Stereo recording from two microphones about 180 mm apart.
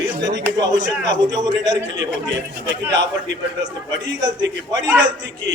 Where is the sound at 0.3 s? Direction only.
20° right (ahead or behind).